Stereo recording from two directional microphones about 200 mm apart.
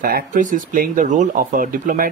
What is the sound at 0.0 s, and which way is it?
Speech, 45° right (ahead or behind).